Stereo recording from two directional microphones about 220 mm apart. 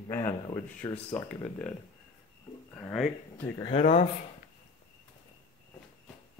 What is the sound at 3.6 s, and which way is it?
Speech, 25° left (ahead or behind).